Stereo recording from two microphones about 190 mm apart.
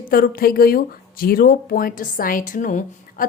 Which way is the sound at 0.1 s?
50° left (ahead or behind).